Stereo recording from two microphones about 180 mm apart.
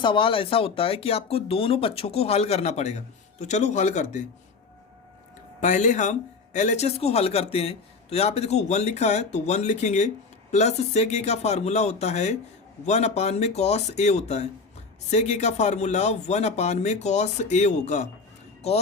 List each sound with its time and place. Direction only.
0.0 s speech: 30° left (ahead or behind)
5.5 s speech: 40° left (ahead or behind)